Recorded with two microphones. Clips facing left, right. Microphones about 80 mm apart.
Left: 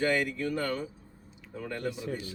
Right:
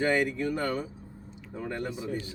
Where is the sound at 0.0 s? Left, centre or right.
Right.